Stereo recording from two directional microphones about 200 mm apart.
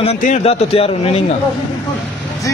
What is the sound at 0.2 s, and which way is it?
Speech, 35° left (ahead or behind).